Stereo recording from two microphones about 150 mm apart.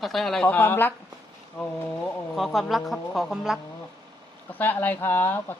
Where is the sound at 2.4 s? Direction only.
Centre (ahead or behind).